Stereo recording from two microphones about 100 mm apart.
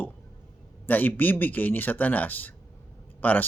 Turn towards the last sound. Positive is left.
turn(degrees=20)  # may be behind; listen again after turning